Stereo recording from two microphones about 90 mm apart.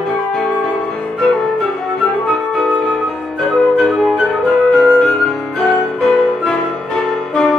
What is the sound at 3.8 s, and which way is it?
Flute, centre (ahead or behind).